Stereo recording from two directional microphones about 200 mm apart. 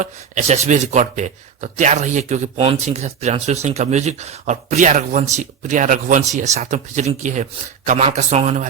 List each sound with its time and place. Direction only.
0.0 s speech: 35° right (ahead or behind)